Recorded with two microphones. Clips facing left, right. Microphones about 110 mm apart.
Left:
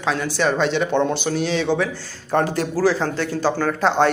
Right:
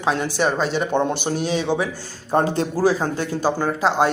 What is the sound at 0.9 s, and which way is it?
Speech, 15° right (ahead or behind).